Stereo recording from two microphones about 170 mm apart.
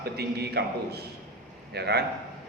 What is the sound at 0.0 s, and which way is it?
A man's voice, 70° right (ahead or behind).